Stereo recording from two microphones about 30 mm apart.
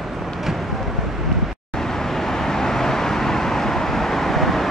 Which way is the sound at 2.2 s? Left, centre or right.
Centre.